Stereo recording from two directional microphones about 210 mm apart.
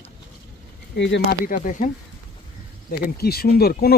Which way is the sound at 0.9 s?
55° left (ahead or behind).